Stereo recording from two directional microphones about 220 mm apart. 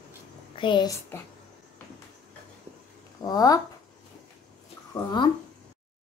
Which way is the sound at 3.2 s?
15° left (ahead or behind).